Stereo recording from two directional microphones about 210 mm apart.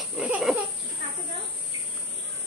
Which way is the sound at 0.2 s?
5° right (ahead or behind).